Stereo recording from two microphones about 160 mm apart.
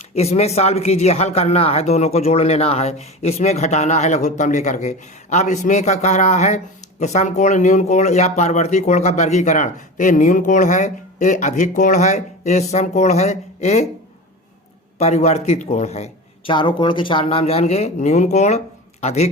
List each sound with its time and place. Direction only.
0.1 s speech: 40° left (ahead or behind)
14.9 s speech: 45° left (ahead or behind)
16.5 s speech: 30° left (ahead or behind)